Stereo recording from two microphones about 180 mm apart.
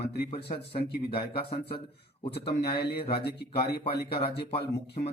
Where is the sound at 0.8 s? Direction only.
60° left (ahead or behind).